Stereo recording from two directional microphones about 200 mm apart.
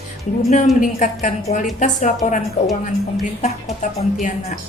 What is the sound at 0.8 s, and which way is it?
A woman's voice, 40° left (ahead or behind).